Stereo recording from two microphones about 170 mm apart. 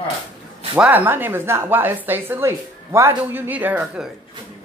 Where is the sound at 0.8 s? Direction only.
10° right (ahead or behind).